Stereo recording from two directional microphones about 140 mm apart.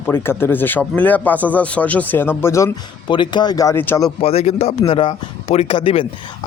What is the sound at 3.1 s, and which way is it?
Speech, 30° left (ahead or behind).